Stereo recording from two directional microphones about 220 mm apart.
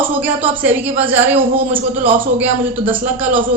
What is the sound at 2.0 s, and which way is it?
A man's voice, 30° right (ahead or behind).